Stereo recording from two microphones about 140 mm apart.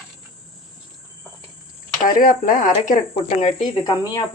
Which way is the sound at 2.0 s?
85° left.